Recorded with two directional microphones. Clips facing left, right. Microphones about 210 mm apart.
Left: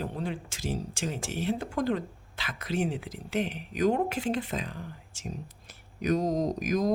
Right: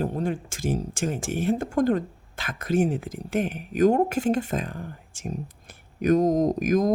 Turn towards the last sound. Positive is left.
turn(degrees=-50)  # may be behind; listen again after turning